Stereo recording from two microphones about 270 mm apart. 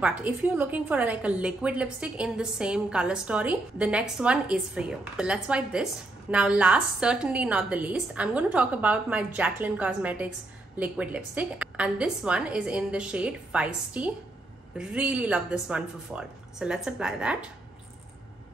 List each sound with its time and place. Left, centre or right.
0.0 s a woman's voice: centre